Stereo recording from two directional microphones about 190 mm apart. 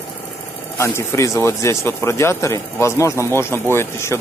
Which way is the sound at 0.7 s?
15° left (ahead or behind).